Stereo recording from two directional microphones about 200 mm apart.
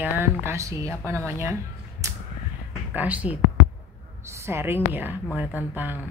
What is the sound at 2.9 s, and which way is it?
Speech, 5° right (ahead or behind).